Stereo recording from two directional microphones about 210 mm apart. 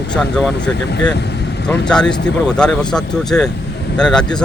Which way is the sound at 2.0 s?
55° left (ahead or behind).